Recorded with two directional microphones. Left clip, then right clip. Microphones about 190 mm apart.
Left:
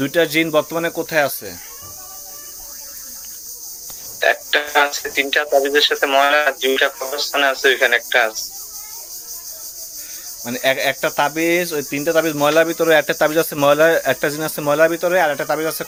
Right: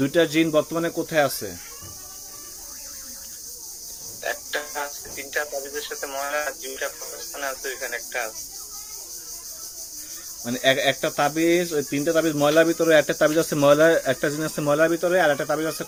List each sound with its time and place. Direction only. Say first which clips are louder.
0.0 s speech: left 3 dB; 15° right (ahead or behind)
4.2 s speech: left 12 dB; 45° left (ahead or behind)
10.4 s speech: left 2 dB; 10° right (ahead or behind)